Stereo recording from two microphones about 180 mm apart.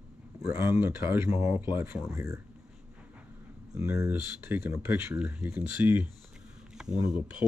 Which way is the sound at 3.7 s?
15° right (ahead or behind).